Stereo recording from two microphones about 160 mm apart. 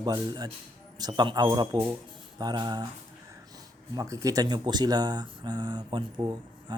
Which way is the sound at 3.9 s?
20° right (ahead or behind).